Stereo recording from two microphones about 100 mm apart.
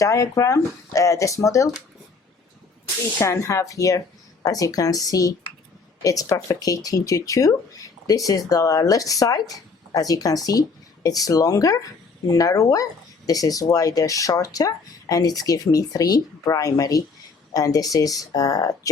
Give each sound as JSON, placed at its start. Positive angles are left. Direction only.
{"t": 0.0, "sound": "speech", "side_deg": 35}
{"t": 3.2, "sound": "speech", "side_deg": 30}